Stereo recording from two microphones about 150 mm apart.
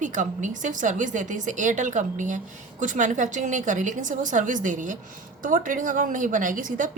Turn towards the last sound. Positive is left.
turn(degrees=-60)  # may be behind; listen again after turning